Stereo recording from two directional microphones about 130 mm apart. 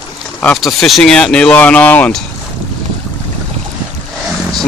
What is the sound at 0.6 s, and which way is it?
Speech, centre (ahead or behind).